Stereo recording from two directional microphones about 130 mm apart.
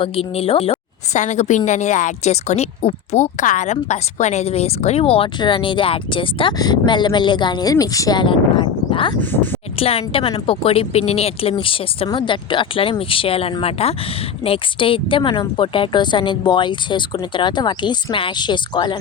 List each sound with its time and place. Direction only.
0.0 s a woman's voice: 50° left (ahead or behind)
1.1 s a woman's voice: 65° left (ahead or behind); by 9.1 s 40° left (ahead or behind)
9.2 s speech: 15° left (ahead or behind)
9.7 s a woman's voice: 45° left (ahead or behind)